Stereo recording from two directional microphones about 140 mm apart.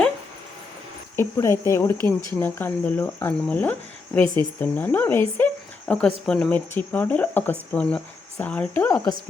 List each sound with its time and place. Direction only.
1.1 s speech: 20° left (ahead or behind)